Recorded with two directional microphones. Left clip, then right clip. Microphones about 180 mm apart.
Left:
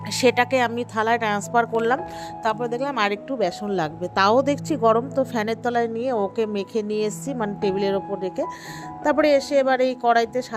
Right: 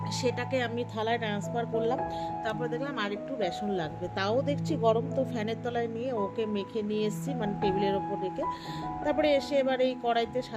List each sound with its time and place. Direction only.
0.1 s speech: 50° left (ahead or behind)
3.3 s speech: 35° left (ahead or behind)
4.7 s a woman's voice: 35° left (ahead or behind)